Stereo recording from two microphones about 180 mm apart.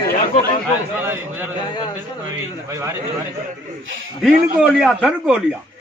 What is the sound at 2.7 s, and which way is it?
Speech, 15° right (ahead or behind).